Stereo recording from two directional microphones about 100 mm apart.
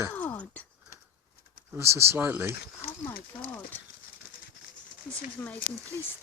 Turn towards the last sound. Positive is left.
turn(degrees=20)  # may be behind; listen again after turning